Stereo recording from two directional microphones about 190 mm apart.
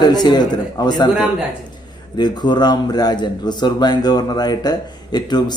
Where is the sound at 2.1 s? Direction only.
20° left (ahead or behind).